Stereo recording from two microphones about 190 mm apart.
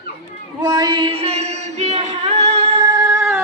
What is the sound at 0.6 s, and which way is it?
Music, 20° right (ahead or behind).